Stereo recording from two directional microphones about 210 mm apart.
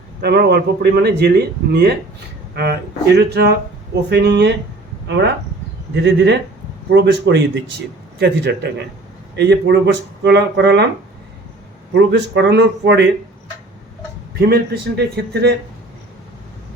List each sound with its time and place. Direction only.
0.2 s a man's voice: 50° right (ahead or behind)
11.9 s speech: 55° right (ahead or behind)
14.3 s a man's voice: 50° right (ahead or behind)